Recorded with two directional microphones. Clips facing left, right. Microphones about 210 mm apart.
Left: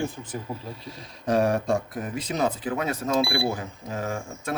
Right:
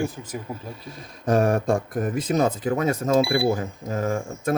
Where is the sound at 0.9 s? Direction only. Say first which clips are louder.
Right 3 dB; 50° right (ahead or behind).